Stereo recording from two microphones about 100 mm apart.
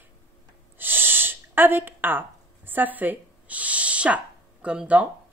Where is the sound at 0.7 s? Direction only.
20° right (ahead or behind).